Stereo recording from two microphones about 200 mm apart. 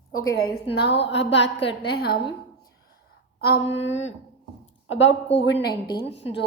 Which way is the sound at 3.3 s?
55° left (ahead or behind).